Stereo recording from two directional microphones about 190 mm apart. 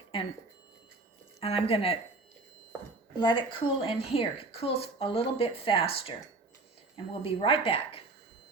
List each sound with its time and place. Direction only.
1.4 s a woman's voice: 30° left (ahead or behind)
3.2 s a woman's voice: 25° left (ahead or behind)